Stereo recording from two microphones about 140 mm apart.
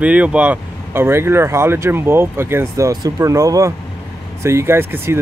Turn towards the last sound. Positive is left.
turn(degrees=-15)  # may be behind; listen again after turning